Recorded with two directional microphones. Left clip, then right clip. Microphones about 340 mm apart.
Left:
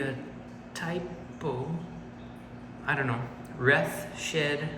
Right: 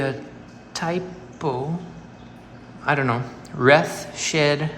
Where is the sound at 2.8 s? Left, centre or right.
Centre.